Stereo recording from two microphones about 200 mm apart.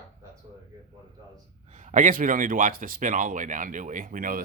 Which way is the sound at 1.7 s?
35° right (ahead or behind).